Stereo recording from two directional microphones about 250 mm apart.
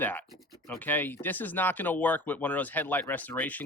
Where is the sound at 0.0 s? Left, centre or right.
Centre.